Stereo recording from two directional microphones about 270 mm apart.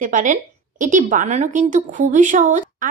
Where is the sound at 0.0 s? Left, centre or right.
Right.